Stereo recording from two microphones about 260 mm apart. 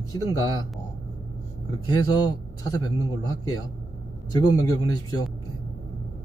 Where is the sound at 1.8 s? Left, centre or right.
Centre.